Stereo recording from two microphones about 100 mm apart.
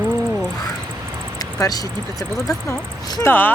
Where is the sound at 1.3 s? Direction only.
40° left (ahead or behind).